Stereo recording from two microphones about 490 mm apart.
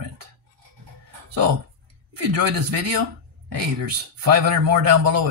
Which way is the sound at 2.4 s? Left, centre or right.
Right.